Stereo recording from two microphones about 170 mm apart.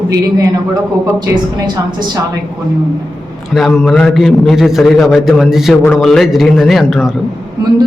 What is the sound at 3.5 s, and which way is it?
A man's voice, centre (ahead or behind).